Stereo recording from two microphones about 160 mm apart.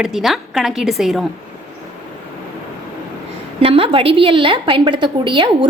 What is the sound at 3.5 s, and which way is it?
A woman's voice, 35° right (ahead or behind).